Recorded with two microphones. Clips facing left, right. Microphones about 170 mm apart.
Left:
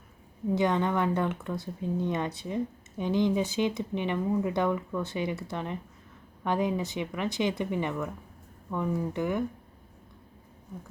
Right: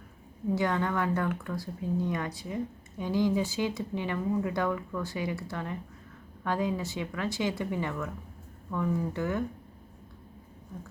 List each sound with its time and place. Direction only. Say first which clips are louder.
0.5 s speech: left 3 dB; 20° left (ahead or behind)